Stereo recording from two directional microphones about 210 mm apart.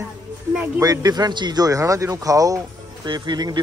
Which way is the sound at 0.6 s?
15° right (ahead or behind).